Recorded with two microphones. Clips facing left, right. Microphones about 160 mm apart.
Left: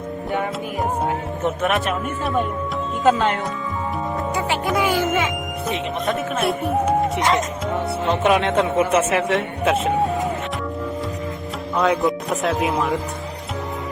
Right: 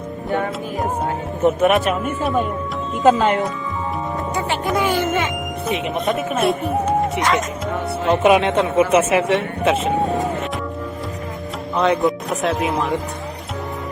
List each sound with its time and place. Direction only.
1.5 s speech: 5° right (ahead or behind)
4.4 s music: centre (ahead or behind)
6.7 s speech: 15° left (ahead or behind)
7.7 s speech: 10° right (ahead or behind)
11.8 s speech: centre (ahead or behind)